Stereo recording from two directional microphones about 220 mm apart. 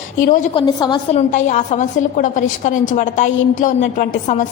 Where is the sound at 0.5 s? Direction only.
20° left (ahead or behind).